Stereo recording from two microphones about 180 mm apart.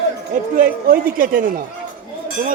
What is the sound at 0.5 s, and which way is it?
Speech, 50° right (ahead or behind).